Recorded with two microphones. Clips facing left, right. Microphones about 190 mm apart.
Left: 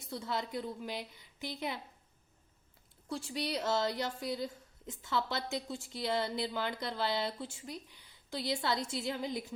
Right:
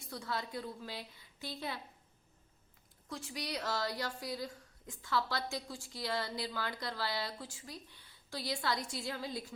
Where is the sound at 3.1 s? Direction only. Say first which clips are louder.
Left 5 dB; 30° left (ahead or behind).